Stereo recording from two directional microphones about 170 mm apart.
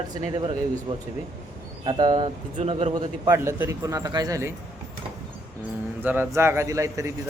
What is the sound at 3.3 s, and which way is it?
A man's voice, 15° right (ahead or behind).